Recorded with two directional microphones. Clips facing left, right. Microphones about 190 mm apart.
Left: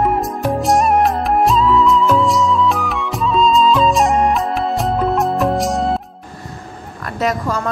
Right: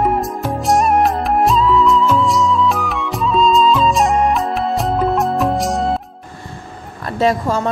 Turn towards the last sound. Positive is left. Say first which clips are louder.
# right 3 dB
turn(degrees=-25)  # may be behind; listen again after turning